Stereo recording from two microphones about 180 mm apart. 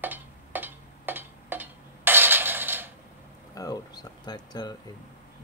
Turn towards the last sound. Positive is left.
turn(degrees=20)  # may be behind; listen again after turning